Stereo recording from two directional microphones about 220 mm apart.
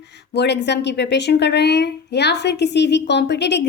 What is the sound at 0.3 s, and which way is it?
A woman's voice, 50° left (ahead or behind).